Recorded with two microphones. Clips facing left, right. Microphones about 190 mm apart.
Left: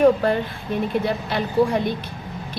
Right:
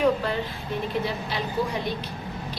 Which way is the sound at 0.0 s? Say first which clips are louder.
Left 7 dB; 50° left (ahead or behind).